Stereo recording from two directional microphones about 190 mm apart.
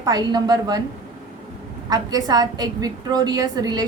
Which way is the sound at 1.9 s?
20° right (ahead or behind).